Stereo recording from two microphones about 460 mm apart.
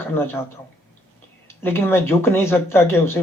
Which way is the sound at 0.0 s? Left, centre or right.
Centre.